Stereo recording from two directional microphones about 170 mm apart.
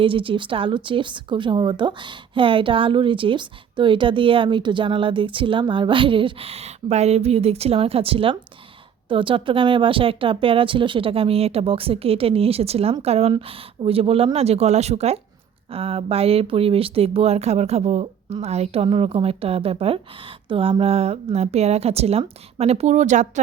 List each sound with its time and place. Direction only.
0.0 s speech: 30° right (ahead or behind)